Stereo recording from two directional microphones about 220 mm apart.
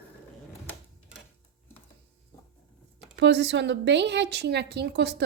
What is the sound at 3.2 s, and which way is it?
Speech, 55° right (ahead or behind).